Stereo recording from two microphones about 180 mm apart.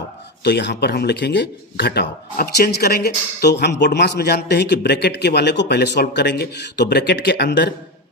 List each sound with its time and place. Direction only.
0.4 s speech: 70° left (ahead or behind)